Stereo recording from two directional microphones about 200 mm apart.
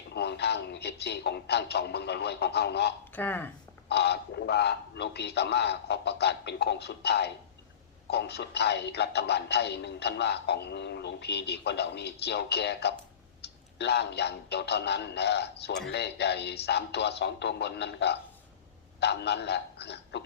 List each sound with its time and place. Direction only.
0.1 s speech: 55° left (ahead or behind)
3.2 s speech: 10° left (ahead or behind)
3.8 s speech: 55° left (ahead or behind)